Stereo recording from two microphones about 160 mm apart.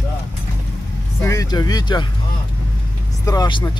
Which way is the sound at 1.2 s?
20° left (ahead or behind).